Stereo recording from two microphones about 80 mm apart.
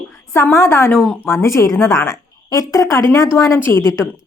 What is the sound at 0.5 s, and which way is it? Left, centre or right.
Speech, left.